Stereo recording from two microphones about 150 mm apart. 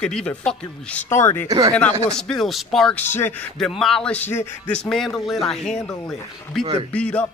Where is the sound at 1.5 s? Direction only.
25° right (ahead or behind).